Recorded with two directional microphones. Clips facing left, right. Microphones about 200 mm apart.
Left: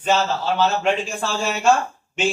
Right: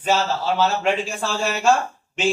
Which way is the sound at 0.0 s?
5° right (ahead or behind).